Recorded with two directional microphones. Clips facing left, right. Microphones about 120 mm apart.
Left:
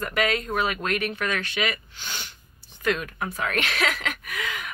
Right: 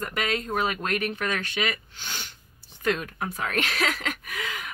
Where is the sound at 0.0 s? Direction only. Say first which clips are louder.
Left 3 dB; 25° right (ahead or behind).